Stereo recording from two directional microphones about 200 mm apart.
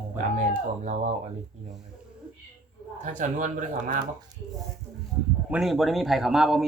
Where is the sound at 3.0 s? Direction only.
40° right (ahead or behind).